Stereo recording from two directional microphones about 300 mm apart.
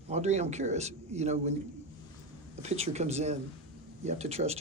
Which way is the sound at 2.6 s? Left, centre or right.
Right.